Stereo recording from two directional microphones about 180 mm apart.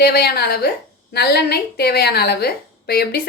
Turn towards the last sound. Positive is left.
turn(degrees=60)  # may be behind; listen again after turning